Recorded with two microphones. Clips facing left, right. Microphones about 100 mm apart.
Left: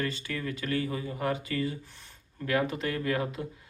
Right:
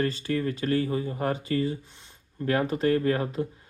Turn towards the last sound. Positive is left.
turn(degrees=-35)  # may be behind; listen again after turning